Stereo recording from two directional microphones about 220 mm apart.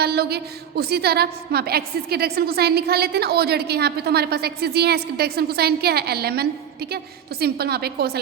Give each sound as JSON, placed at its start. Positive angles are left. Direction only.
{"t": 0.0, "sound": "a woman's voice", "side_deg": -45}